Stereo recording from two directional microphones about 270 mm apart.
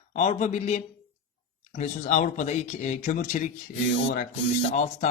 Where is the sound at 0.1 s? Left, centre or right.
Left.